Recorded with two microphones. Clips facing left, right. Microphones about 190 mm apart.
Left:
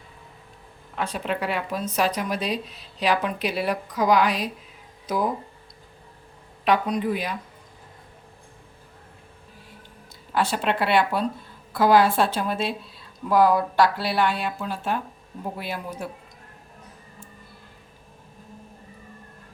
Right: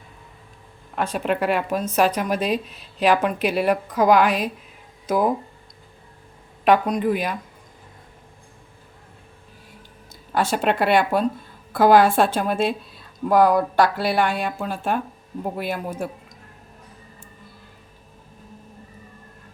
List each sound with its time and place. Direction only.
0.9 s a woman's voice: 50° right (ahead or behind)
6.7 s a woman's voice: 50° right (ahead or behind)
10.3 s a woman's voice: 45° right (ahead or behind)